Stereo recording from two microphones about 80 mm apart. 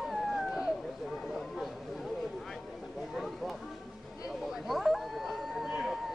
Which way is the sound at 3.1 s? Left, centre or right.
Centre.